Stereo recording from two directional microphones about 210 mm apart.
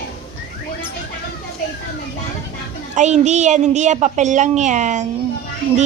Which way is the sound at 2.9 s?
35° right (ahead or behind).